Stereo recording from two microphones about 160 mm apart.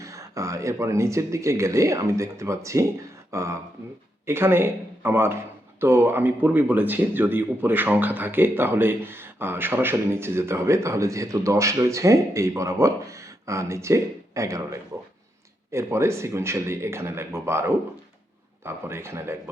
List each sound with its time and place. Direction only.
0.0 s speech: 20° right (ahead or behind)